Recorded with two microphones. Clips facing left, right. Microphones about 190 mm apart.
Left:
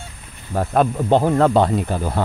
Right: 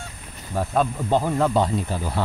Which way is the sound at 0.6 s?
60° left (ahead or behind).